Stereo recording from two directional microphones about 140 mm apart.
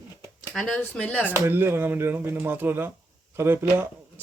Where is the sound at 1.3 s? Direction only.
15° right (ahead or behind).